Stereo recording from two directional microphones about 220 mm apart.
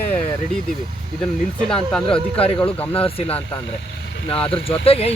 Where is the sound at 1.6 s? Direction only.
5° left (ahead or behind).